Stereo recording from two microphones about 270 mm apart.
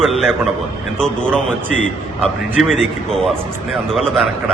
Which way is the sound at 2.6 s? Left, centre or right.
Centre.